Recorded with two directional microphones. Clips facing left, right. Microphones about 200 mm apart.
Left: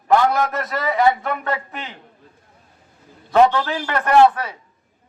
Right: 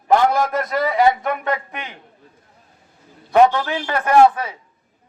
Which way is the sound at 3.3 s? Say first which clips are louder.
Right 1 dB; 15° right (ahead or behind).